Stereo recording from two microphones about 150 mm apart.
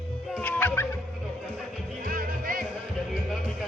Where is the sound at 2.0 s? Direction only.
70° right (ahead or behind).